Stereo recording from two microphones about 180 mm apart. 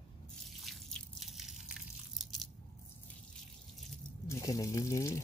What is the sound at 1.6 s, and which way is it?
Crushing, 5° right (ahead or behind).